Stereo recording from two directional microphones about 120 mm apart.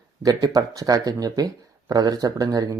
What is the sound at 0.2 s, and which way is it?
Speech, 30° right (ahead or behind).